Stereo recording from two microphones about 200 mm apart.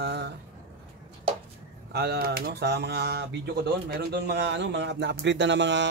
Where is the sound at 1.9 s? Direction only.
55° right (ahead or behind).